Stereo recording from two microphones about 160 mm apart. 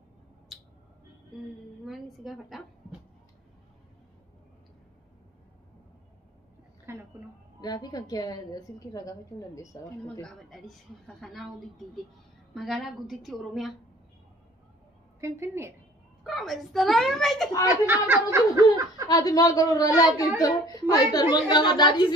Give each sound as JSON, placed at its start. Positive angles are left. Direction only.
{"t": 1.9, "sound": "a woman's voice", "side_deg": 0}
{"t": 6.9, "sound": "a sound", "side_deg": -15}
{"t": 7.6, "sound": "a child's voice", "side_deg": 25}
{"t": 10.2, "sound": "a woman's voice", "side_deg": 0}
{"t": 15.1, "sound": "speech", "side_deg": -15}
{"t": 16.3, "sound": "a woman's voice", "side_deg": 0}
{"t": 17.6, "sound": "speech", "side_deg": -15}
{"t": 19.0, "sound": "a child's voice", "side_deg": 25}